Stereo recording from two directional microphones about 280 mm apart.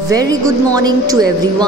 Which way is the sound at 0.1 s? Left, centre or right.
Centre.